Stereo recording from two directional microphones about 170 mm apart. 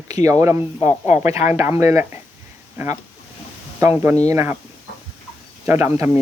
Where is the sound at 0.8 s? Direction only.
15° right (ahead or behind).